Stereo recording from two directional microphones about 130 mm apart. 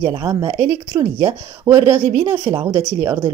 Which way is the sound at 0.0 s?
30° right (ahead or behind).